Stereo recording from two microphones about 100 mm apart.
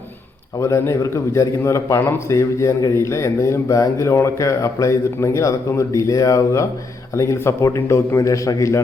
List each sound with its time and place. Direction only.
0.6 s a man's voice: 30° left (ahead or behind)